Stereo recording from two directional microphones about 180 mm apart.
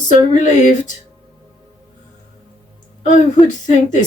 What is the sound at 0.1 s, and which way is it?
Music, 45° left (ahead or behind).